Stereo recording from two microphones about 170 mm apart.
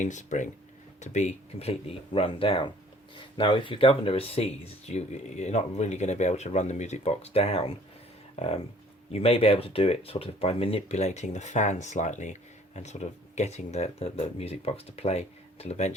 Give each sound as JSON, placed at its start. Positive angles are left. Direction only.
{"t": 0.0, "sound": "speech", "side_deg": 45}